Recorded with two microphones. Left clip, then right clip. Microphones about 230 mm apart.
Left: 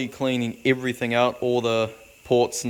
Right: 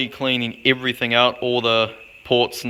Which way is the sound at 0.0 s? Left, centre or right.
Left.